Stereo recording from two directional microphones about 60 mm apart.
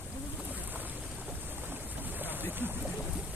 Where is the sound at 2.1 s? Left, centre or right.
Right.